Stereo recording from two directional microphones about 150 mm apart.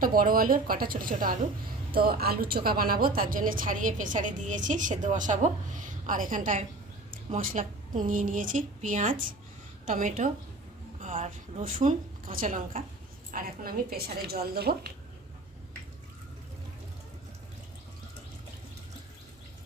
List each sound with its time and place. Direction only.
0.0 s speech: 70° right (ahead or behind)
1.9 s a woman's voice: 85° right